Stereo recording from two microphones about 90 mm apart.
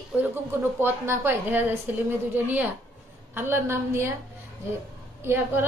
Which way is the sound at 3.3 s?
25° right (ahead or behind).